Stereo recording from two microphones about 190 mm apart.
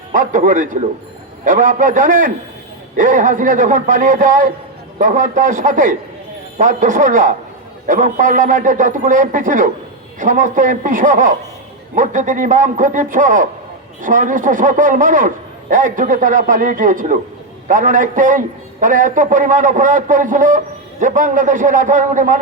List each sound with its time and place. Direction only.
0.1 s a man's voice: 45° right (ahead or behind)